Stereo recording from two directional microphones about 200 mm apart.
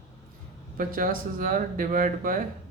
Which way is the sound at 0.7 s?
45° right (ahead or behind).